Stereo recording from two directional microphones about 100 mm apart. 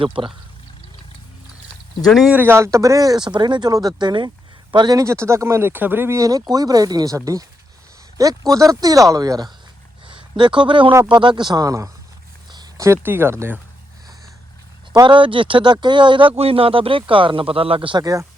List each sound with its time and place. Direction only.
0.0 s speech: 60° right (ahead or behind)
2.3 s speech: 25° right (ahead or behind); by 4.9 s 50° right (ahead or behind)
4.9 s speech: 30° right (ahead or behind)
6.1 s speech: 35° right (ahead or behind)
8.2 s speech: 35° right (ahead or behind)
10.1 s speech: 55° right (ahead or behind); by 11.9 s 35° right (ahead or behind)
12.5 s a sound: 45° right (ahead or behind)
12.8 s speech: 25° right (ahead or behind)
15.0 s speech: 55° right (ahead or behind)
16.4 s speech: 70° right (ahead or behind)
18.0 s speech: 35° right (ahead or behind)